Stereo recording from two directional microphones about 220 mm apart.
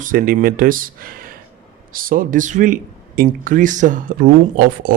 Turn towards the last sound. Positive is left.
turn(degrees=-40)  # may be behind; listen again after turning